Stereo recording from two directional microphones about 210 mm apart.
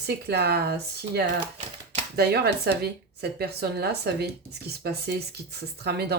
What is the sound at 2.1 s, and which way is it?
A woman's voice, 50° right (ahead or behind).